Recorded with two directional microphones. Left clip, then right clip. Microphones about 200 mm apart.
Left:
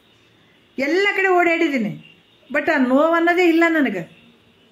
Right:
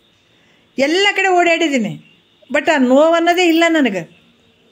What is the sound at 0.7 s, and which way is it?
A man's voice, 40° right (ahead or behind).